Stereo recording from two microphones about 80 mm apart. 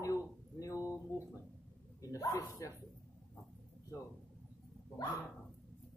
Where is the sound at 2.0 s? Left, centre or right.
Left.